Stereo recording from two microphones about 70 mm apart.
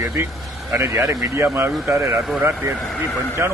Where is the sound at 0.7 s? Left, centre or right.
Right.